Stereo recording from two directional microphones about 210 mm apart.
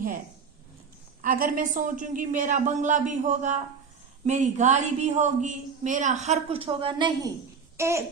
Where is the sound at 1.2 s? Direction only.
45° right (ahead or behind); by 7.3 s 25° right (ahead or behind).